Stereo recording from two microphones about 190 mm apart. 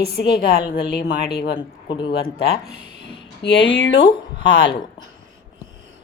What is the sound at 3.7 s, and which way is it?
Speech, 65° left (ahead or behind).